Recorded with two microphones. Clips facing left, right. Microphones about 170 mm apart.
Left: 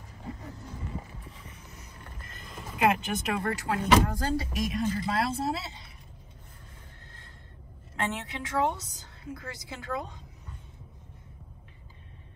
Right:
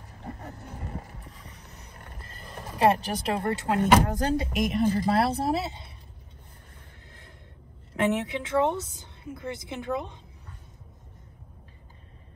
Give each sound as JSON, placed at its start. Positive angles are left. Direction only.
{"t": 0.3, "sound": "vehicle", "side_deg": -65}
{"t": 1.4, "sound": "creak", "side_deg": -35}
{"t": 2.1, "sound": "music", "side_deg": -30}
{"t": 2.8, "sound": "a woman's voice", "side_deg": -35}
{"t": 7.9, "sound": "a woman's voice", "side_deg": -20}